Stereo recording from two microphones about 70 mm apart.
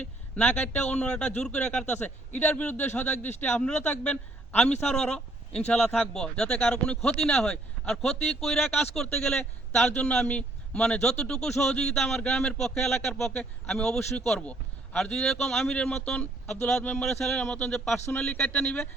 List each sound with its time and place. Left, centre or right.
0.0 s a man's voice: centre
1.9 s a man's voice: left; by 17.9 s centre
18.3 s speech: left